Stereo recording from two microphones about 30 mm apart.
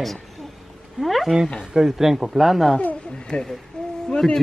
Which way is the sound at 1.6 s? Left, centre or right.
Centre.